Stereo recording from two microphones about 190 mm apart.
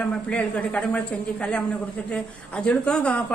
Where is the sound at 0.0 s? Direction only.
5° left (ahead or behind).